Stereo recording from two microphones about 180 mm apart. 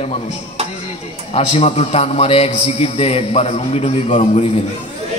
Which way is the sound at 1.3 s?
35° left (ahead or behind).